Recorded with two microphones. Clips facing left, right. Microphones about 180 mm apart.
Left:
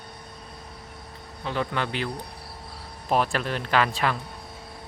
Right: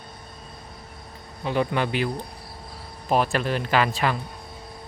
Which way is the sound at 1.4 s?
15° right (ahead or behind).